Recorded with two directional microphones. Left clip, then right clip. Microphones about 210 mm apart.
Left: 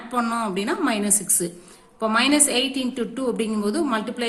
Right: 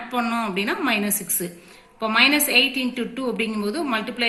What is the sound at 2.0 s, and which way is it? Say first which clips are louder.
A woman's voice: right 2 dB; 55° left (ahead or behind).